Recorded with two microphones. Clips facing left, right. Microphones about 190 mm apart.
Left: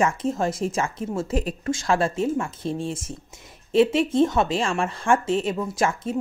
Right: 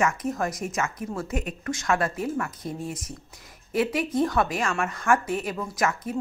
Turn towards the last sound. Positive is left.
turn(degrees=25)  # may be behind; listen again after turning